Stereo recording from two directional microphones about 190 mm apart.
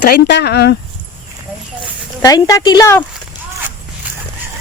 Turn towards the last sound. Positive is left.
turn(degrees=15)  # may be behind; listen again after turning